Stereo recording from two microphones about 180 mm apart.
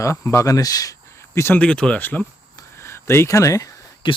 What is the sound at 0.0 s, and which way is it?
Speech, 15° left (ahead or behind).